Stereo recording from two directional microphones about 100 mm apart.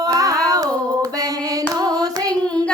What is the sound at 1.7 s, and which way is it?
Carnatic music, 40° right (ahead or behind).